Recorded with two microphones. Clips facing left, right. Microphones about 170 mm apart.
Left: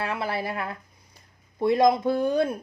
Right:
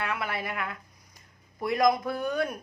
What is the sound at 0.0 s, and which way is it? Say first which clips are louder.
Speech: left 4 dB; 30° left (ahead or behind).